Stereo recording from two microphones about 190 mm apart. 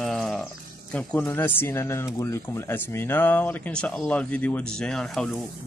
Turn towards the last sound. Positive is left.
turn(degrees=5)  # may be behind; listen again after turning